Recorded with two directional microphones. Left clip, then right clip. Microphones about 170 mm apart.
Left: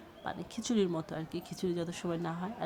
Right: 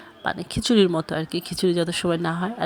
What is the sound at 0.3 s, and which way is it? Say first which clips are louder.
Speech: right 14 dB; 30° right (ahead or behind).